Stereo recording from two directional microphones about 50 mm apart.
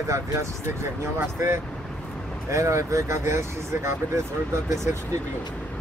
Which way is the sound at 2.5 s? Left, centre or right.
Right.